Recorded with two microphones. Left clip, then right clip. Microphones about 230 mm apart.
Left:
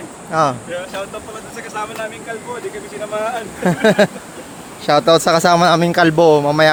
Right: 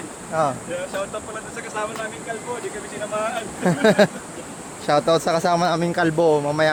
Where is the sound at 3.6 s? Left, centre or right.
Centre.